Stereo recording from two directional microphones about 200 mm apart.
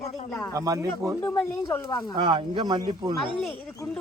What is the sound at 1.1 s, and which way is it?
Speech, 15° left (ahead or behind).